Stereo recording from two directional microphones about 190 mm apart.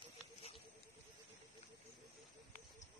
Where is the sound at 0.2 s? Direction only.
30° left (ahead or behind).